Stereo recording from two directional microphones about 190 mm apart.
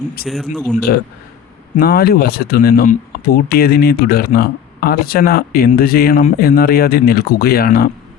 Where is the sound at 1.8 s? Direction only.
55° left (ahead or behind).